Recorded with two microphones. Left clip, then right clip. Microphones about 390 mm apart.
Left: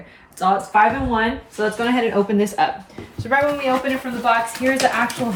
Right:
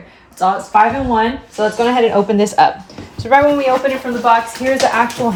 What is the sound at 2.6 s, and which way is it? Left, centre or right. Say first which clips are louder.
Speech: right 9 dB; centre.